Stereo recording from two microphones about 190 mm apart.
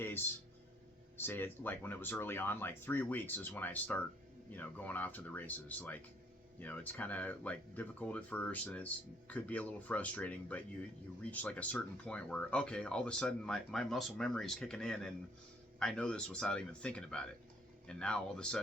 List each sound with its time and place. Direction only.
1.1 s speech: 10° left (ahead or behind)